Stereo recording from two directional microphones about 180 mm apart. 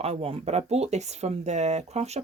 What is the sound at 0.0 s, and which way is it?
Speech, 35° right (ahead or behind).